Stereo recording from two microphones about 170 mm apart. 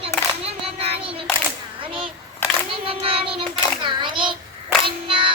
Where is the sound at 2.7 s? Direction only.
35° right (ahead or behind).